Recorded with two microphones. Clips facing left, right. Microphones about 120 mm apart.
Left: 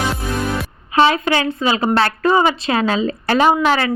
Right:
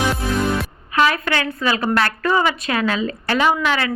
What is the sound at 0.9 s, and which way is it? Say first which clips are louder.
A woman's voice: left 4 dB; 25° left (ahead or behind).